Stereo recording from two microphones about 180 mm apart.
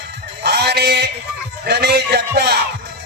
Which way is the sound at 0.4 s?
65° right (ahead or behind).